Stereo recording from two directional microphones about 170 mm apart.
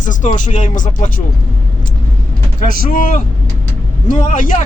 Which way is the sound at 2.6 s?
50° left (ahead or behind).